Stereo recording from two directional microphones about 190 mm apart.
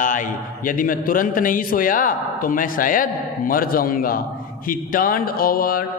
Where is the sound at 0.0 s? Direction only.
45° left (ahead or behind).